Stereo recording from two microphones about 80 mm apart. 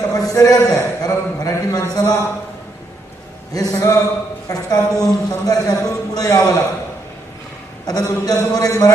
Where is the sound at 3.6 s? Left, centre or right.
Left.